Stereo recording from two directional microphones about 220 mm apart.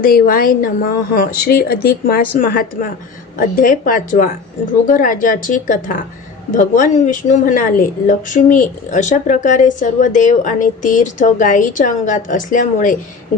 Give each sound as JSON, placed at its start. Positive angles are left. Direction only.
{"t": 0.0, "sound": "speech", "side_deg": 40}